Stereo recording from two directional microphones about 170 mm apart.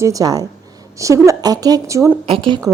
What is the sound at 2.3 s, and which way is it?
Speech, 30° right (ahead or behind).